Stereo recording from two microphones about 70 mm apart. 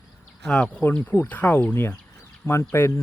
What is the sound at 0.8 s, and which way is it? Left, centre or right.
Speech, left.